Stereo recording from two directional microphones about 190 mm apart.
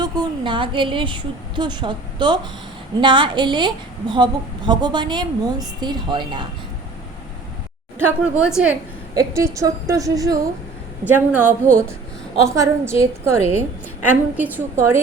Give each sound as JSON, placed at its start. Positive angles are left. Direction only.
{"t": 0.0, "sound": "a woman's voice", "side_deg": -25}
{"t": 7.9, "sound": "a woman's voice", "side_deg": -10}
{"t": 9.1, "sound": "a woman's voice", "side_deg": -15}
{"t": 13.4, "sound": "a woman's voice", "side_deg": 35}
{"t": 14.0, "sound": "a woman's voice", "side_deg": -10}